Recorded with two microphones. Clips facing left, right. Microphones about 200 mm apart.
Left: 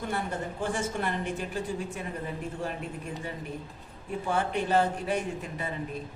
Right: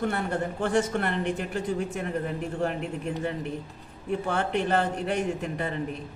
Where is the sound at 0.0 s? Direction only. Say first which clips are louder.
Right 5 dB; 65° right (ahead or behind).